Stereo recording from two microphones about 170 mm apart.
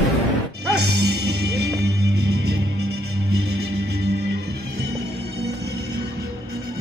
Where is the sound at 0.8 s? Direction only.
80° right.